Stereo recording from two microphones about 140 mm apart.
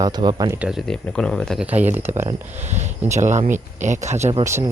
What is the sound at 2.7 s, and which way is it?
Speech, 55° right (ahead or behind).